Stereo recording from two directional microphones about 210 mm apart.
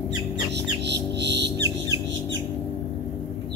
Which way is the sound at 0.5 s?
55° right (ahead or behind).